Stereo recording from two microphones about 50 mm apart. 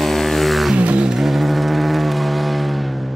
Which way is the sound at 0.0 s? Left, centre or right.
Centre.